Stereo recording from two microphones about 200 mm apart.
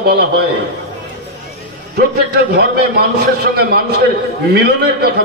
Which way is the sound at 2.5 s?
50° right (ahead or behind).